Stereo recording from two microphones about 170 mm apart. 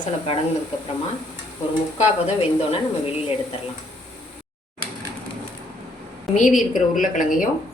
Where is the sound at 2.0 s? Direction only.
40° left (ahead or behind).